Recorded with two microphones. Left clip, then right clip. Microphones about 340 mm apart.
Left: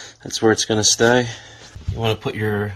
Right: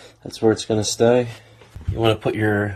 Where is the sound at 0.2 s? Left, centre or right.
Centre.